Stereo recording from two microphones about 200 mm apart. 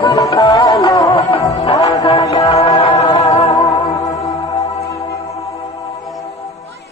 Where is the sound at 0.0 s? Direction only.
15° left (ahead or behind).